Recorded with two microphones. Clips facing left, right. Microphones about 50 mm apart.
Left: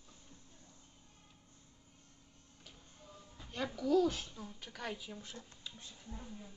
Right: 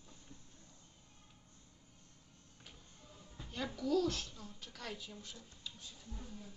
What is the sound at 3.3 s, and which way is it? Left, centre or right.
A woman's voice, centre.